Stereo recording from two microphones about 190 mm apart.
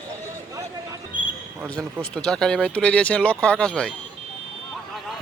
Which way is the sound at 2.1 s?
5° left (ahead or behind).